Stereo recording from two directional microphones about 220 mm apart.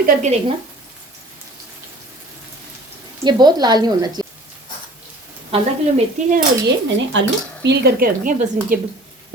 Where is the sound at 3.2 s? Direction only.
20° right (ahead or behind).